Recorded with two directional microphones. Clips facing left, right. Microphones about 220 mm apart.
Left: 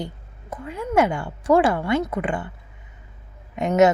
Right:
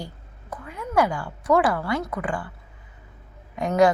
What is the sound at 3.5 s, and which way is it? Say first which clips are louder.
Speech: left 2 dB; 20° left (ahead or behind).